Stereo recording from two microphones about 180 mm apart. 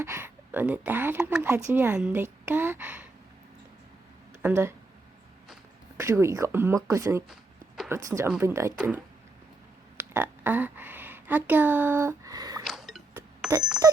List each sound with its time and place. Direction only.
0.0 s speech: 15° right (ahead or behind)
4.4 s speech: 15° right (ahead or behind)
6.0 s speech: 15° right (ahead or behind)
10.0 s speech: 10° right (ahead or behind)
12.6 s a sound: centre (ahead or behind)